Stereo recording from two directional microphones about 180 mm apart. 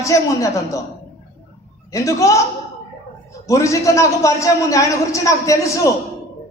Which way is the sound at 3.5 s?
15° left (ahead or behind).